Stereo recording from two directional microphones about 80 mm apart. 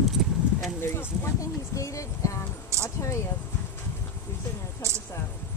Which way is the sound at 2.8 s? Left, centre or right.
Left.